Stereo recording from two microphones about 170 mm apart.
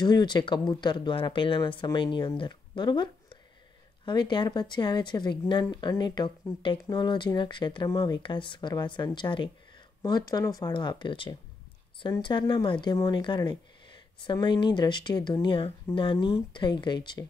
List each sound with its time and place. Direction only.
0.0 s a woman's voice: 25° left (ahead or behind)